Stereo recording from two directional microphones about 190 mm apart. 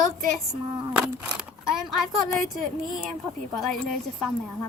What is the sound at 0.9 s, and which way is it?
A child's voice, 5° right (ahead or behind).